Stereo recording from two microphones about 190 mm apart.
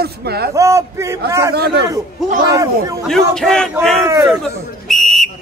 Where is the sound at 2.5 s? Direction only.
15° right (ahead or behind).